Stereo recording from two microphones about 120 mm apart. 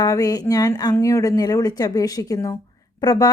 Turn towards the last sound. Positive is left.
turn(degrees=35)  # may be behind; listen again after turning